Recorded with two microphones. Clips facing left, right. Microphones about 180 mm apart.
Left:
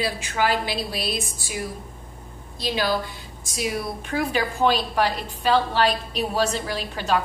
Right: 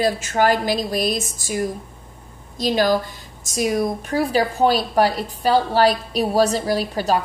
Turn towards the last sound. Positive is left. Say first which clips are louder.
# right 4 dB
turn(degrees=-40)  # may be behind; listen again after turning